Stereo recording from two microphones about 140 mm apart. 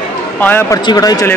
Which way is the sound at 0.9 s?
25° left (ahead or behind).